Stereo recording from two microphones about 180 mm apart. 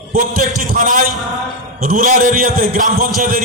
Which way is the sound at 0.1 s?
55° right (ahead or behind).